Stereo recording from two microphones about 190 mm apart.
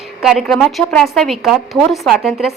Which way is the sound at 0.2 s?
Centre (ahead or behind).